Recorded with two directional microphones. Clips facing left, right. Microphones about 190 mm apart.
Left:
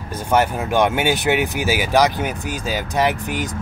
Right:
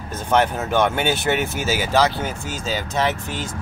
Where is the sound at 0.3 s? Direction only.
10° left (ahead or behind).